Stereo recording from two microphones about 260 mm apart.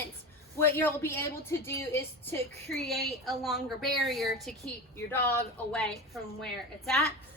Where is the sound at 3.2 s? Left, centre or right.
Centre.